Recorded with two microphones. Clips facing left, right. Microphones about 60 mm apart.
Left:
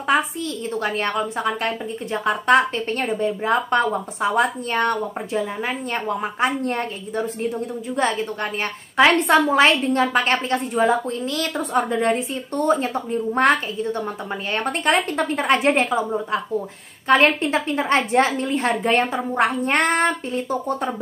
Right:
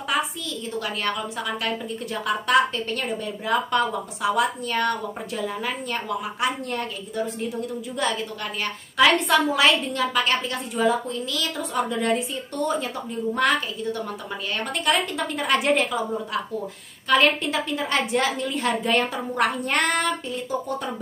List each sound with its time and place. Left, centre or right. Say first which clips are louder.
0.1 s a woman's voice: left 5 dB; left
8.9 s a woman's voice: left 3 dB; left